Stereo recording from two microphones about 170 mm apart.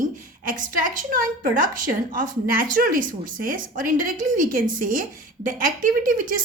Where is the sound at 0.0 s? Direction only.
50° right (ahead or behind).